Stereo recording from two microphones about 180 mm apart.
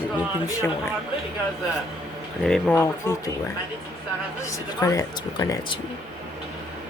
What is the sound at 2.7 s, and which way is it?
Speech, 15° left (ahead or behind).